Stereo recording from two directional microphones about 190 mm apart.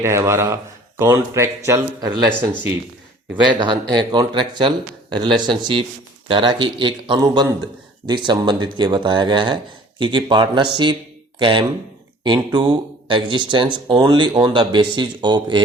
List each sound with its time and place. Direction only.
0.0 s speech: 15° right (ahead or behind)
3.5 s speech: 25° right (ahead or behind)